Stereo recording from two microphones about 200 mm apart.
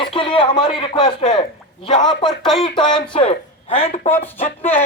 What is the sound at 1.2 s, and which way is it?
Speech, 35° left (ahead or behind).